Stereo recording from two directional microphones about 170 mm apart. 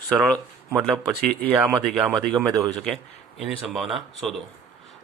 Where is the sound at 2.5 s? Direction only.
25° right (ahead or behind).